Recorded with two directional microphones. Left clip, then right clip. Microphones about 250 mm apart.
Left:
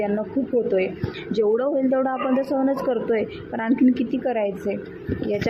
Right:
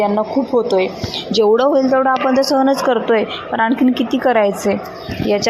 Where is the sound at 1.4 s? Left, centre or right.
Centre.